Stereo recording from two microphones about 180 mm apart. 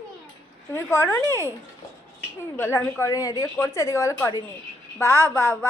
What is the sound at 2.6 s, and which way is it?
A woman's voice, 15° left (ahead or behind).